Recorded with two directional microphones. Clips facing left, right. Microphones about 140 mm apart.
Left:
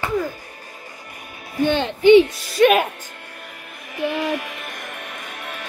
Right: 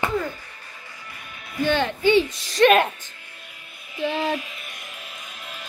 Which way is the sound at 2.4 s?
10° left (ahead or behind).